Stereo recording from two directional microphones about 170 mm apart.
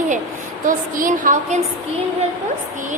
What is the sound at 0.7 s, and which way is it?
Speech, 55° right (ahead or behind).